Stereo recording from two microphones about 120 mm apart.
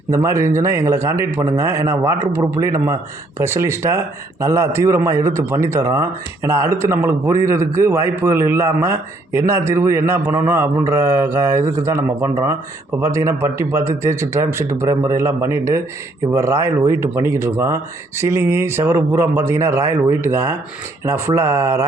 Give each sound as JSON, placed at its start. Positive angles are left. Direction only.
{"t": 0.1, "sound": "speech", "side_deg": -25}